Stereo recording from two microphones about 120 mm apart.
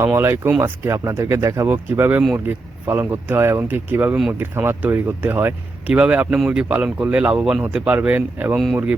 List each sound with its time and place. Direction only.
0.0 s speech: 20° right (ahead or behind)